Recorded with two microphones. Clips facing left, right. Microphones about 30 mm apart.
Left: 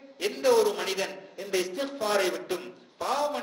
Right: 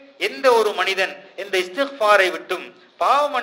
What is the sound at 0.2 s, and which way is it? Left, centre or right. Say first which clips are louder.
A man's voice: right 6 dB; right.